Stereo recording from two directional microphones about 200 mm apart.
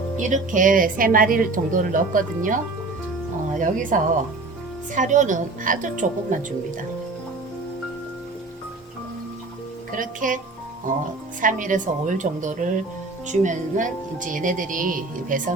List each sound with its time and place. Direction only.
0.2 s speech: 40° right (ahead or behind)
3.6 s speech: 40° right (ahead or behind)
9.9 s speech: 40° right (ahead or behind)